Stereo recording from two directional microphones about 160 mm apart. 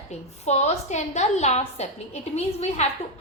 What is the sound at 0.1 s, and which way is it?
A woman's voice, 45° left (ahead or behind).